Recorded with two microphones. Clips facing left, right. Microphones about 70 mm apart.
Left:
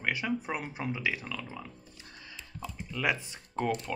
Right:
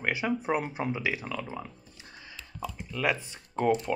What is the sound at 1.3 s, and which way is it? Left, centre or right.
Speech, right.